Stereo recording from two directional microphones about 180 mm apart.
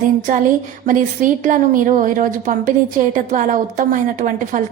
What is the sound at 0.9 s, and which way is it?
A woman's voice, 45° right (ahead or behind).